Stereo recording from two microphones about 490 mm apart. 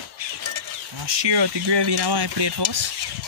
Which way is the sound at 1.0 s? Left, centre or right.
Right.